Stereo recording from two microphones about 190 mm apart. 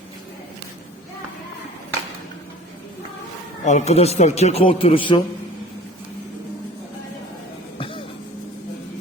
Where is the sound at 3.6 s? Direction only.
40° left (ahead or behind).